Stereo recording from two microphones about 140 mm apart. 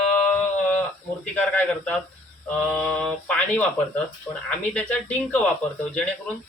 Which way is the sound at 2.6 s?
5° left (ahead or behind).